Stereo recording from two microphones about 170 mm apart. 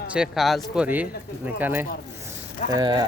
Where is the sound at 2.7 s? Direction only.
25° right (ahead or behind).